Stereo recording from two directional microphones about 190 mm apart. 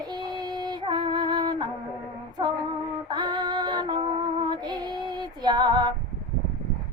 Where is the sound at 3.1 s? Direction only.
25° right (ahead or behind).